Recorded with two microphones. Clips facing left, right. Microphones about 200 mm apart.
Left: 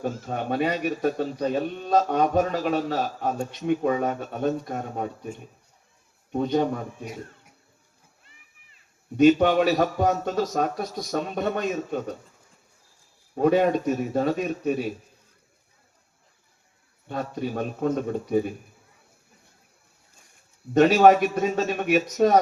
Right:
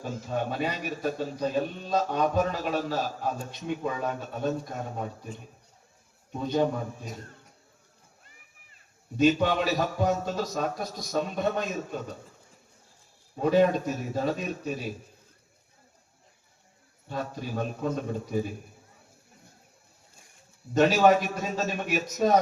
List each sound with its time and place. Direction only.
0.0 s a man's voice: 60° left (ahead or behind)
7.0 s speech: 10° left (ahead or behind)
9.1 s a man's voice: 60° left (ahead or behind)
13.4 s a man's voice: 55° left (ahead or behind)
17.1 s a man's voice: 55° left (ahead or behind)
20.7 s a man's voice: 60° left (ahead or behind)